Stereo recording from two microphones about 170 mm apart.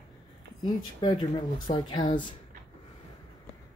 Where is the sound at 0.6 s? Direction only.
30° left (ahead or behind).